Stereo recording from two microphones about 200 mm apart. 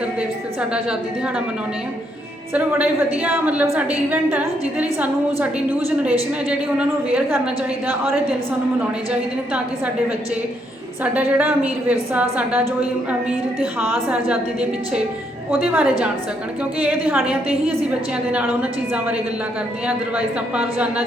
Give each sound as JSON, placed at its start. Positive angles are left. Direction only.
{"t": 2.5, "sound": "a woman's voice", "side_deg": -10}
{"t": 11.0, "sound": "a woman's voice", "side_deg": -5}
{"t": 13.8, "sound": "a woman's voice", "side_deg": -10}
{"t": 20.1, "sound": "a woman's voice", "side_deg": -5}